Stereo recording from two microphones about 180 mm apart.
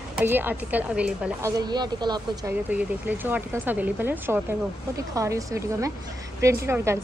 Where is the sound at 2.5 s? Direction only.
10° right (ahead or behind).